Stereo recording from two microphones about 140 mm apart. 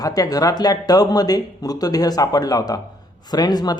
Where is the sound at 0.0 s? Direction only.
25° left (ahead or behind).